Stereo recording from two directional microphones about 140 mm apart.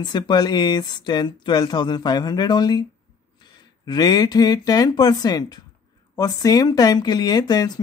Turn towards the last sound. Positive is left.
turn(degrees=30)  # may be behind; listen again after turning